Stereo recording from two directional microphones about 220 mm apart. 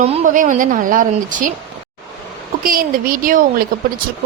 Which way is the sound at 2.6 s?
40° right (ahead or behind).